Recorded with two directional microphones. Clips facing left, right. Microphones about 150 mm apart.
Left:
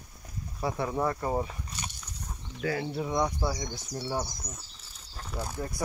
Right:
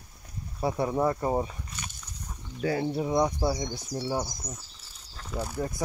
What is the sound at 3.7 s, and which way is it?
Speech, 15° right (ahead or behind).